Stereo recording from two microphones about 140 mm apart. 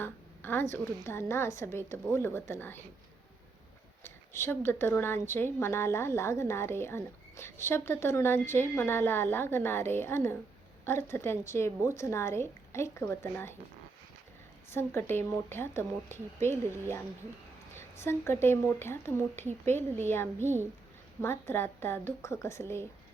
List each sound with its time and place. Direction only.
0.0 s a woman's voice: 15° left (ahead or behind)
4.0 s a woman's voice: 15° left (ahead or behind)
14.7 s a woman's voice: 15° left (ahead or behind)
17.7 s a woman's voice: 20° left (ahead or behind)